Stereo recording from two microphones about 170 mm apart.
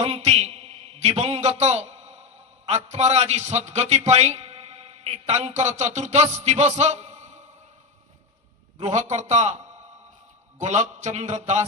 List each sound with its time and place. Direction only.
0.0 s a man's voice: 40° right (ahead or behind)
8.8 s speech: 45° right (ahead or behind)
10.6 s speech: 45° right (ahead or behind)